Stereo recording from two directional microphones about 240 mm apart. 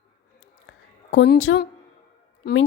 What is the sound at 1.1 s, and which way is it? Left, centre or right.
A woman's voice, left.